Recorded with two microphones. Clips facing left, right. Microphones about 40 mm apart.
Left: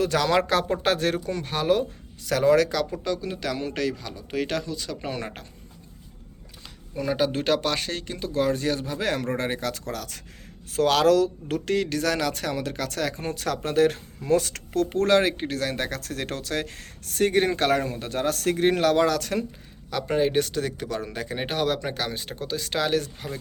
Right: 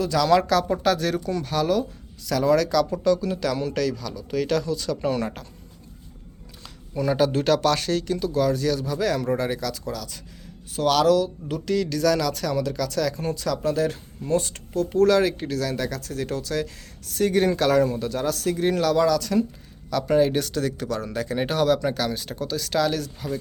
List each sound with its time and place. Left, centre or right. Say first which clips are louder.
0.0 s speech: right 2 dB; left
2.9 s speech: right 7 dB; left
6.9 s speech: right 3 dB; centre
8.3 s speech: even; left
9.8 s speech: right 1 dB; left
10.7 s speech: even; left
13.3 s speech: even; left
14.3 s speech: left 1 dB; left
19.9 s speech: right 3 dB; left